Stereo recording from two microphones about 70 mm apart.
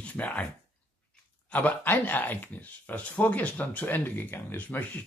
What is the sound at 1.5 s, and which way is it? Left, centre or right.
Speech, left.